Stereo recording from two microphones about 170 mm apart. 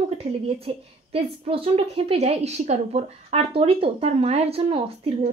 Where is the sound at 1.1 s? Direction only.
35° right (ahead or behind).